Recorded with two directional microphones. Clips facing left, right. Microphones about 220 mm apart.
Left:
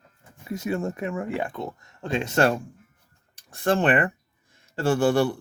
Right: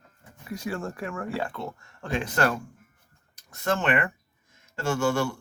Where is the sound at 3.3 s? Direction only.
30° left (ahead or behind).